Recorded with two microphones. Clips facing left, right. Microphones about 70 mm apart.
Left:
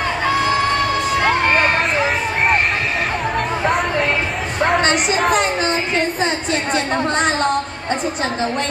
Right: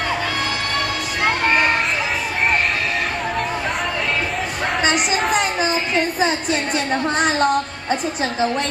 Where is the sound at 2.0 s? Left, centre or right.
Left.